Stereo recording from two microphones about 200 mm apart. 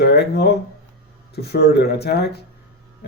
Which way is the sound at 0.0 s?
55° left (ahead or behind).